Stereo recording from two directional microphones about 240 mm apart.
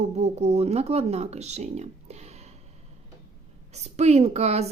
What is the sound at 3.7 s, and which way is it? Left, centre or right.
Speech, right.